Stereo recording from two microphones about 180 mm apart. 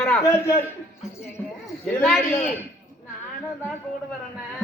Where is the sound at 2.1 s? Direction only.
10° left (ahead or behind).